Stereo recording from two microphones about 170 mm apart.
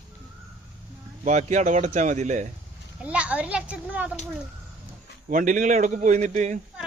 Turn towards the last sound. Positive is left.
turn(degrees=-45)  # may be behind; listen again after turning